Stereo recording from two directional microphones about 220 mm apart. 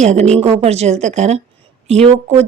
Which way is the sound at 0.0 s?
30° right (ahead or behind).